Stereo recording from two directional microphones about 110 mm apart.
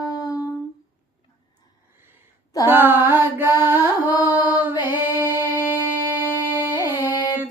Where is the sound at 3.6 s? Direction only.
20° right (ahead or behind).